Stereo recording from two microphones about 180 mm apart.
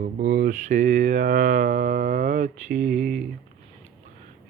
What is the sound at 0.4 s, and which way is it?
Mantra, 45° right (ahead or behind).